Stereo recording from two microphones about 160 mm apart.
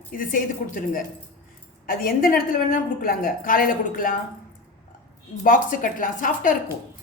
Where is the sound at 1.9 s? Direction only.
65° left (ahead or behind).